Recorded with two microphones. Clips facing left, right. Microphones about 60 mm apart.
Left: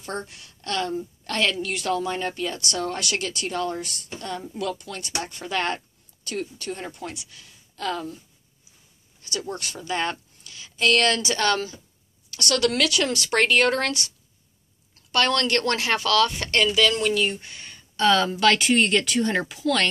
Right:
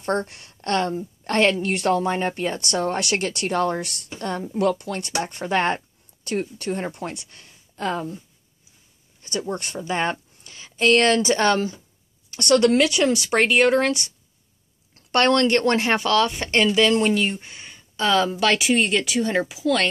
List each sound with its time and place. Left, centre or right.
0.0 s a woman's voice: right
5.2 s a woman's voice: right
7.7 s speech: right
9.2 s speech: right
15.0 s a sound: right
15.2 s speech: right; by 19.9 s centre